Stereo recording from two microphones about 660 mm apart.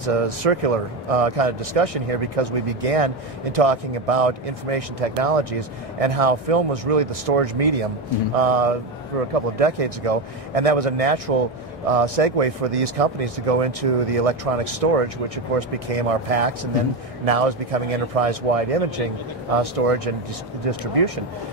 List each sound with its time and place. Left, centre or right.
0.0 s speech: right